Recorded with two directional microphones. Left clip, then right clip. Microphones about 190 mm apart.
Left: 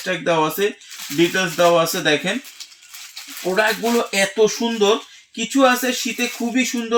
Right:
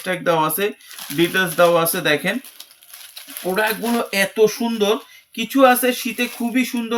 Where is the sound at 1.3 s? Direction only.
15° right (ahead or behind).